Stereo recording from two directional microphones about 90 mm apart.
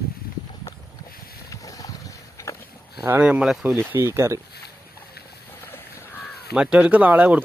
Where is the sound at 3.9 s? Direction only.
30° right (ahead or behind).